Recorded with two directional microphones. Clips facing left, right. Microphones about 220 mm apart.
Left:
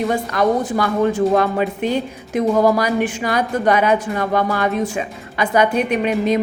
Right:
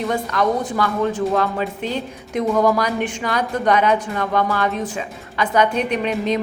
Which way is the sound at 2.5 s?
30° left (ahead or behind).